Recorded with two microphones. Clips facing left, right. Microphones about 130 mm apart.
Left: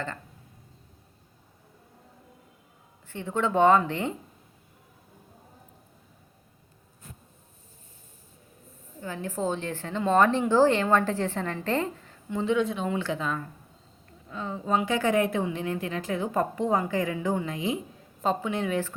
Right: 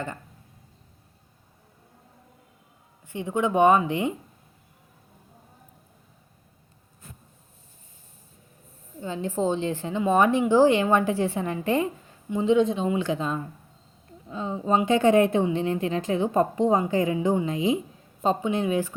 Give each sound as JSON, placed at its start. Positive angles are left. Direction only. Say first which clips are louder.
{"t": 3.1, "sound": "a woman's voice", "louder": "right 2 dB", "side_deg": -15}
{"t": 9.0, "sound": "a woman's voice", "louder": "right 4 dB", "side_deg": -20}
{"t": 14.3, "sound": "a woman's voice", "louder": "right 3 dB", "side_deg": -20}